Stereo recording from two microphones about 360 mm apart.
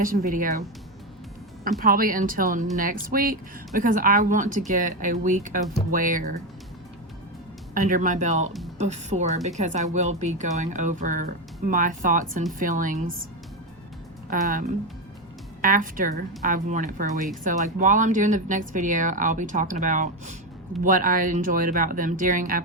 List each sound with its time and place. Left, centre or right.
0.0 s a woman's voice: right
1.8 s a woman's voice: right
7.7 s a woman's voice: right
14.3 s a woman's voice: right